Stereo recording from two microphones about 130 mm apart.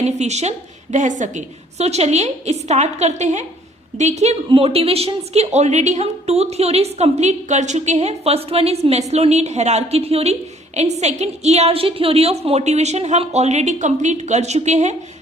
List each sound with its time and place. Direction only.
0.2 s a woman's voice: 60° right (ahead or behind)
4.4 s a woman's voice: 45° right (ahead or behind); by 14.9 s 60° right (ahead or behind)